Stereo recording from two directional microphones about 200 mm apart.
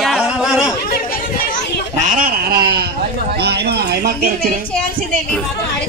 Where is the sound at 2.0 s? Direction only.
45° right (ahead or behind).